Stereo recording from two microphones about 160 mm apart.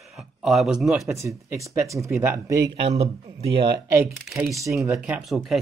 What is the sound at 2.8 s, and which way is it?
Speech, 40° right (ahead or behind).